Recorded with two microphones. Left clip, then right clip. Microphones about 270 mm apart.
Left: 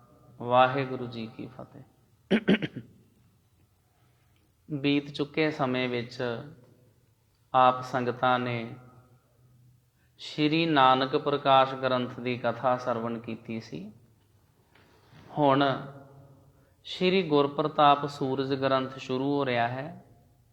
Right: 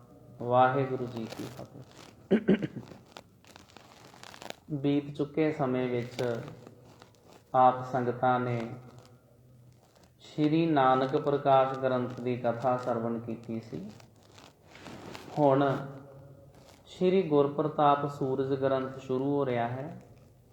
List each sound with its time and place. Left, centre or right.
0.3 s speech: left
2.2 s speech: left
4.7 s speech: left
7.5 s speech: left
10.3 s speech: left
15.4 s speech: left
16.8 s speech: left